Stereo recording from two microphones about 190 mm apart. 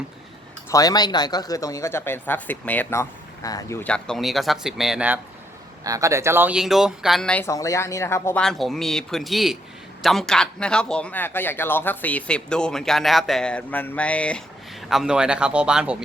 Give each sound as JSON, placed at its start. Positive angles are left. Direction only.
{"t": 0.7, "sound": "speech", "side_deg": 20}
{"t": 5.8, "sound": "speech", "side_deg": -15}
{"t": 7.4, "sound": "speech", "side_deg": 15}